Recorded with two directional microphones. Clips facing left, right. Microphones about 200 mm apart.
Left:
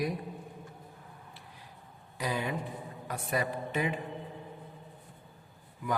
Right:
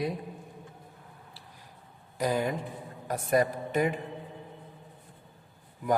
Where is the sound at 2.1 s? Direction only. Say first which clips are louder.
Right 5 dB; 45° right (ahead or behind).